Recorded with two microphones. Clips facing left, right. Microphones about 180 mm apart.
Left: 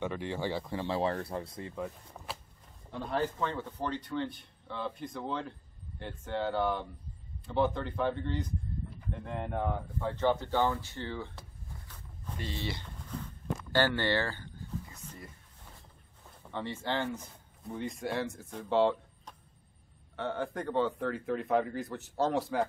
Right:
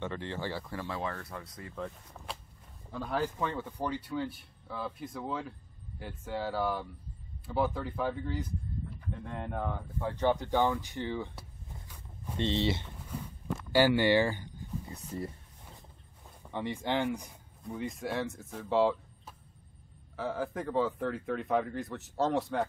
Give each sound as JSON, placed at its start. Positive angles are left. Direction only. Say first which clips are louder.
{"t": 0.0, "sound": "speech", "louder": "left 2 dB", "side_deg": 15}
{"t": 2.1, "sound": "a sound", "louder": "even", "side_deg": 10}
{"t": 3.1, "sound": "speech", "louder": "even", "side_deg": -10}
{"t": 9.3, "sound": "speech", "louder": "left 2 dB", "side_deg": 15}
{"t": 9.9, "sound": "speech", "louder": "right 1 dB", "side_deg": -10}
{"t": 12.4, "sound": "speech", "louder": "right 8 dB", "side_deg": -25}
{"t": 13.0, "sound": "a sound", "louder": "even", "side_deg": -10}
{"t": 16.5, "sound": "speech", "louder": "right 2 dB", "side_deg": -15}
{"t": 17.6, "sound": "speech", "louder": "even", "side_deg": 0}